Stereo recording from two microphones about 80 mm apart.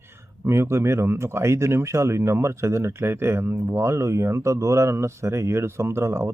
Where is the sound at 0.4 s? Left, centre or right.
Right.